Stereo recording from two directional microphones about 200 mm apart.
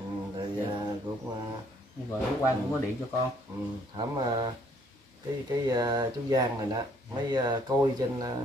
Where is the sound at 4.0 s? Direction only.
20° right (ahead or behind).